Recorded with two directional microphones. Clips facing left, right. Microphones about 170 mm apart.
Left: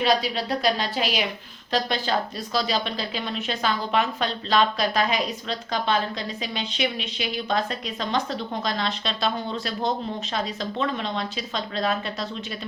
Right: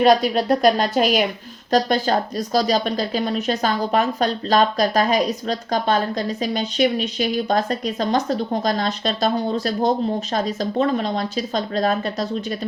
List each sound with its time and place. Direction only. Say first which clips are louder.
0.0 s speech: right 7 dB; 50° right (ahead or behind)